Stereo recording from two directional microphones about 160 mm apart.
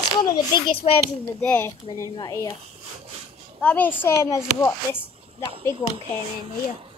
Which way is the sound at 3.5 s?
10° left (ahead or behind).